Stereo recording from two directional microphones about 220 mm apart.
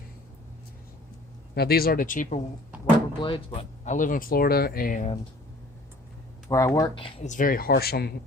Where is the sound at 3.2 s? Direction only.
25° left (ahead or behind).